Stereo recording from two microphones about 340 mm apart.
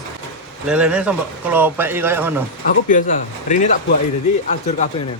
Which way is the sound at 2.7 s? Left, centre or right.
Left.